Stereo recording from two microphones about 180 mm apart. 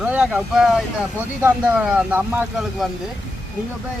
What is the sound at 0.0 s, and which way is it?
Speech, 10° right (ahead or behind).